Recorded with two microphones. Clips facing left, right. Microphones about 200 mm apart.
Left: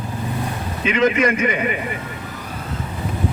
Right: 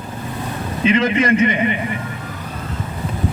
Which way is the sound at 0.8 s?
30° right (ahead or behind).